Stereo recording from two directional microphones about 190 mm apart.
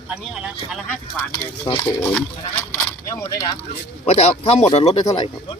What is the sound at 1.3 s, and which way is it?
Speech, 20° left (ahead or behind).